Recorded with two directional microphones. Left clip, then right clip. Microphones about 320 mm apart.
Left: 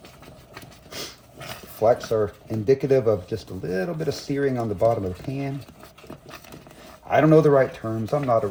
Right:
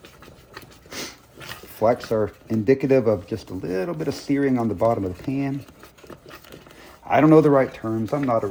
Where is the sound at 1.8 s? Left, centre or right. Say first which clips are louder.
Left 1 dB; right.